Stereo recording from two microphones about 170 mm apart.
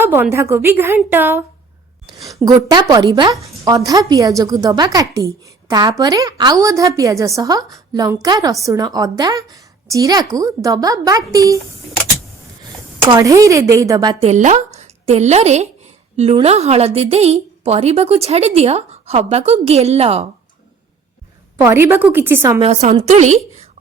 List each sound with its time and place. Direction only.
0.0 s a woman's voice: 15° right (ahead or behind)
2.4 s a woman's voice: 25° right (ahead or behind)
13.1 s a woman's voice: 20° right (ahead or behind)
14.3 s a woman's voice: 45° right (ahead or behind)
21.6 s a woman's voice: 15° right (ahead or behind)
22.6 s a woman's voice: 40° right (ahead or behind)